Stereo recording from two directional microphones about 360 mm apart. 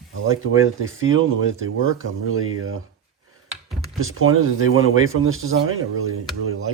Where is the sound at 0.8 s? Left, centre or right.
Right.